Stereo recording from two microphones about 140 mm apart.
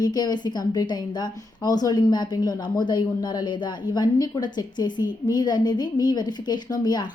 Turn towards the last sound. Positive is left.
turn(degrees=30)  # may be behind; listen again after turning